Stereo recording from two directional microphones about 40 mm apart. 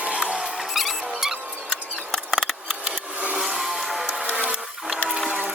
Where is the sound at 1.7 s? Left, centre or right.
Centre.